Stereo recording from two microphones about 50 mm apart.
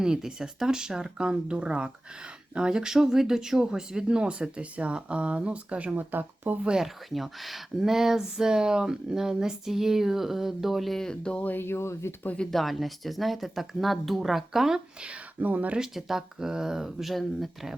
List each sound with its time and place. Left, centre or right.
0.0 s speech: centre
5.9 s speech: right
6.7 s speech: centre
11.4 s speech: left
12.5 s speech: centre
15.4 s speech: right
16.0 s speech: centre